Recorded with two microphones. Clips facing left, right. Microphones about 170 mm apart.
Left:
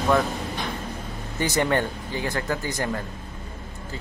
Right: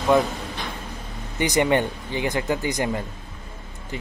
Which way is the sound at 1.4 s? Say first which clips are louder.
Right 3 dB; 20° right (ahead or behind).